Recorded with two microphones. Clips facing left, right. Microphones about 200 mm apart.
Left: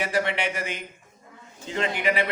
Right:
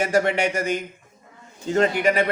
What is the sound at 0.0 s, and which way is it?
A man's voice, 45° right (ahead or behind).